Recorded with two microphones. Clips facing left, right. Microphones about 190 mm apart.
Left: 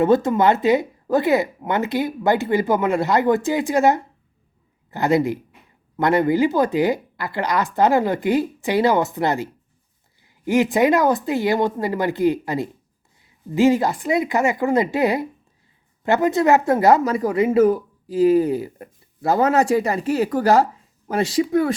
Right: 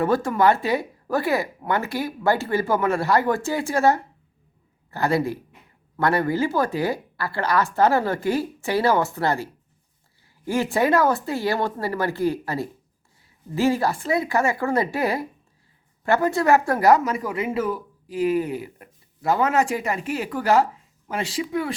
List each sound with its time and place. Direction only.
0.0 s speech: 20° left (ahead or behind); by 21.7 s 45° left (ahead or behind)